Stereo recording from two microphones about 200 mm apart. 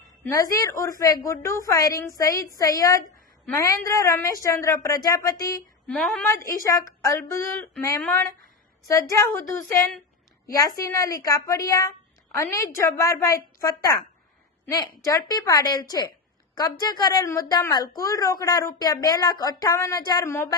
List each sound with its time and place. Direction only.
0.5 s a woman's voice: 15° left (ahead or behind)
5.9 s a woman's voice: 5° left (ahead or behind)